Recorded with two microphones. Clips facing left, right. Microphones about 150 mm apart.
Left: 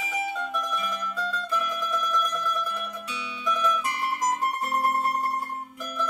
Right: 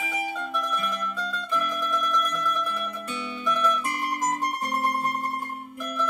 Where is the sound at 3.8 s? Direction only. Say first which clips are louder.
Even; 50° right (ahead or behind).